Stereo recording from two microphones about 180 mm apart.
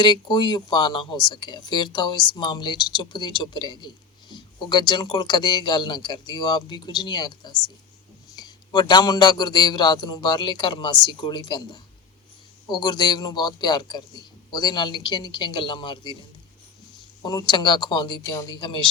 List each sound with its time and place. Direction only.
0.0 s speech: 25° left (ahead or behind)
17.2 s speech: 25° left (ahead or behind)